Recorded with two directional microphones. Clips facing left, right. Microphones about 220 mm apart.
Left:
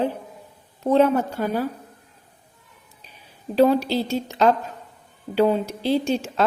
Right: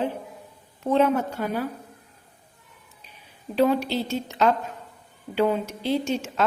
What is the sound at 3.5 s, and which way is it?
Speech, 35° left (ahead or behind).